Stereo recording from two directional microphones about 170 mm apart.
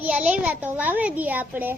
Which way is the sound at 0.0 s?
10° right (ahead or behind).